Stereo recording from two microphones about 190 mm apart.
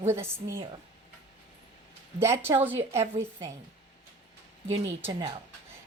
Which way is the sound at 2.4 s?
10° right (ahead or behind).